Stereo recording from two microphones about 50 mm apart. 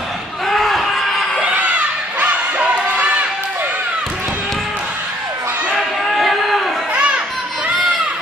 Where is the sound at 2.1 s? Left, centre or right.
Right.